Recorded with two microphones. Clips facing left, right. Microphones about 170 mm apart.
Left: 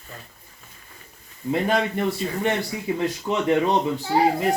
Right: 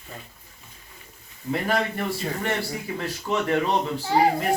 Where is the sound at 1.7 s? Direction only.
20° left (ahead or behind).